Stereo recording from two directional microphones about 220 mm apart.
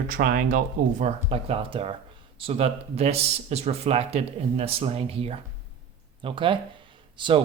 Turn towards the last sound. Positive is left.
turn(degrees=-20)  # may be behind; listen again after turning